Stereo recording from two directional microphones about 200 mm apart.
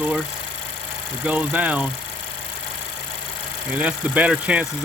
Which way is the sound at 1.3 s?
5° right (ahead or behind).